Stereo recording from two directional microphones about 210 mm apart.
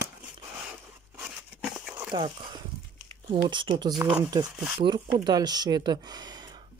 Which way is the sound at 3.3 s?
25° right (ahead or behind).